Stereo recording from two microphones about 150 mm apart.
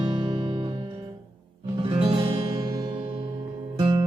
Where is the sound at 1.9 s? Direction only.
30° right (ahead or behind).